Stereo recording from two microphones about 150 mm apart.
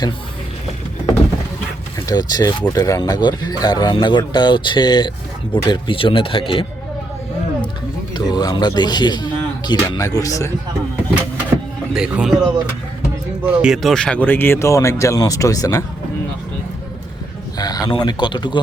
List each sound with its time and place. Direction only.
2.0 s speech: 25° left (ahead or behind)
8.4 s speech: 25° left (ahead or behind)
11.1 s vehicle: 5° right (ahead or behind)
13.4 s speech: 5° right (ahead or behind); by 15.8 s 25° left (ahead or behind)
17.6 s speech: 25° left (ahead or behind)